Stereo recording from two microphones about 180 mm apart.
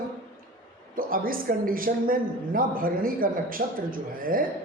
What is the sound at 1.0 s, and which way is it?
A man's voice, 50° right (ahead or behind).